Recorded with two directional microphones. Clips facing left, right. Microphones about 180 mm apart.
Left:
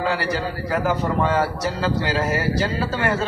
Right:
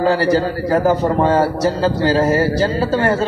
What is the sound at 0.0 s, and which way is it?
A man's voice, 35° right (ahead or behind).